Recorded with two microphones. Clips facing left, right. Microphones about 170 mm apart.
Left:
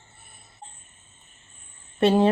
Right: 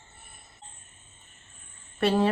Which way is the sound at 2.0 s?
20° left (ahead or behind).